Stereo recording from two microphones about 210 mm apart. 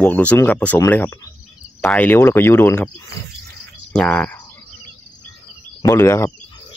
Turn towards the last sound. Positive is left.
turn(degrees=10)  # may be behind; listen again after turning